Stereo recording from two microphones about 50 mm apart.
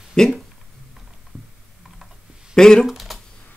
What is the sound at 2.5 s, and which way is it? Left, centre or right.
Speech, centre.